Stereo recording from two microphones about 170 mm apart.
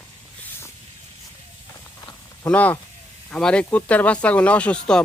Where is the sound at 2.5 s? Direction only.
10° left (ahead or behind).